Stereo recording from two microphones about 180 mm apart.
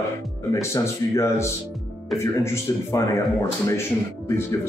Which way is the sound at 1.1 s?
15° left (ahead or behind).